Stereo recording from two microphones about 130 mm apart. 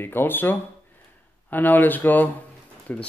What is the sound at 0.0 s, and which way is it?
Speech, 15° left (ahead or behind).